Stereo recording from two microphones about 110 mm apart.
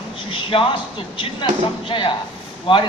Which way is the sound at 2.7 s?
50° left (ahead or behind).